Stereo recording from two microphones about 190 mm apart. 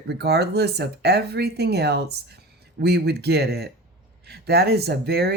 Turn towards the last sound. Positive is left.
turn(degrees=-60)  # may be behind; listen again after turning